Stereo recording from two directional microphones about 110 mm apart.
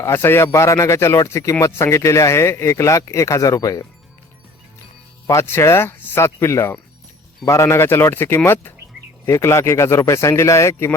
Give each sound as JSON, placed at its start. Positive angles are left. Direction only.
{"t": 0.0, "sound": "speech", "side_deg": 20}
{"t": 5.2, "sound": "speech", "side_deg": 25}